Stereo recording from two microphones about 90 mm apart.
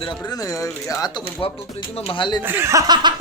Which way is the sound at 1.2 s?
90° left.